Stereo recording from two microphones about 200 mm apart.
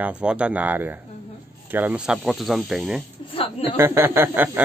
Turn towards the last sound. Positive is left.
turn(degrees=-10)  # may be behind; listen again after turning